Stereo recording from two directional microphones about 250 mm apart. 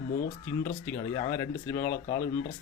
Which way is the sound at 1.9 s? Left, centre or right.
Left.